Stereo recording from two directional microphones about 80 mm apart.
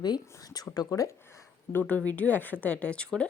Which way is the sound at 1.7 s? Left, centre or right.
Centre.